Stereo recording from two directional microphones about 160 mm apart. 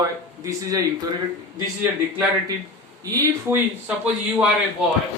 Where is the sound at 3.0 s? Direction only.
20° right (ahead or behind).